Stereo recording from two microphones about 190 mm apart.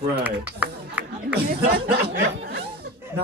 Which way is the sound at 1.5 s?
55° right (ahead or behind).